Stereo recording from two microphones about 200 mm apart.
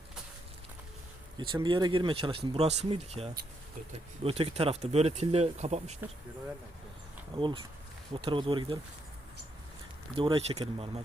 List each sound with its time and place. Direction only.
1.4 s speech: 25° right (ahead or behind)
7.3 s speech: 25° right (ahead or behind)
10.2 s speech: 25° right (ahead or behind)